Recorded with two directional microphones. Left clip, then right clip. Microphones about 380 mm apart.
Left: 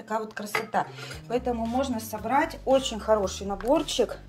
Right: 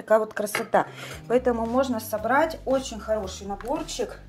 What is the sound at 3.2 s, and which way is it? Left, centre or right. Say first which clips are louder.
Speech: left 4 dB; left.